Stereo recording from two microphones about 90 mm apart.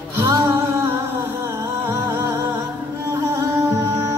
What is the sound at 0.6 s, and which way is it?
Music, 20° right (ahead or behind).